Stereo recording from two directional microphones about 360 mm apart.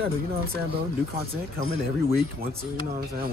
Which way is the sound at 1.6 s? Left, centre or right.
Left.